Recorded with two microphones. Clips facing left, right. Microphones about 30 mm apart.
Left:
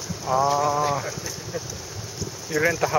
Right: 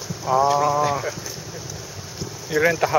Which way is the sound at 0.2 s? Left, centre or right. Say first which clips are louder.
Right 3 dB; centre.